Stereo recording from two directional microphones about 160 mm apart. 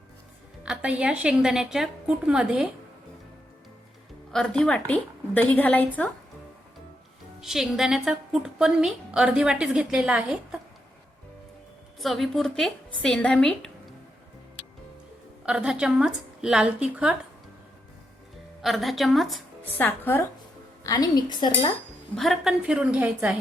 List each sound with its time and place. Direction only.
0.6 s a woman's voice: 5° right (ahead or behind)
4.3 s a woman's voice: 5° left (ahead or behind)
7.4 s a woman's voice: centre (ahead or behind)
11.9 s a woman's voice: centre (ahead or behind)
15.4 s a woman's voice: 5° right (ahead or behind)
18.6 s a woman's voice: centre (ahead or behind)
19.6 s speech: 10° left (ahead or behind)
20.8 s speech: 25° left (ahead or behind)
22.1 s a woman's voice: centre (ahead or behind)